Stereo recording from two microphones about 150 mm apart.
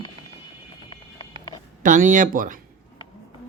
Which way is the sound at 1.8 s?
60° right (ahead or behind).